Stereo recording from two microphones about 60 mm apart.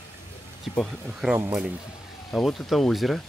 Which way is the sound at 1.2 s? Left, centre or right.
Centre.